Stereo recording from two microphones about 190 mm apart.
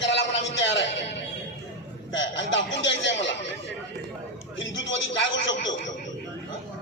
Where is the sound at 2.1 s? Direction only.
70° left (ahead or behind).